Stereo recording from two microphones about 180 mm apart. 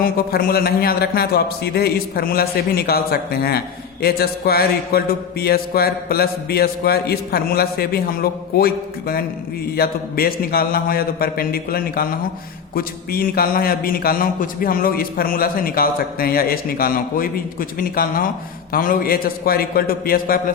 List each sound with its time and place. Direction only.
0.0 s a man's voice: 55° left (ahead or behind)